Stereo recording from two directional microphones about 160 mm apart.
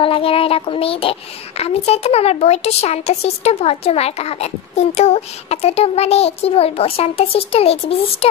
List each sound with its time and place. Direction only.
0.0 s speech: 35° left (ahead or behind)